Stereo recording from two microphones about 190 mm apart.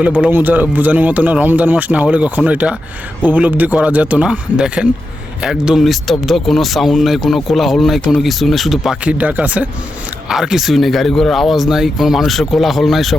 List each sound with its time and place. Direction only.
0.0 s speech: 10° right (ahead or behind)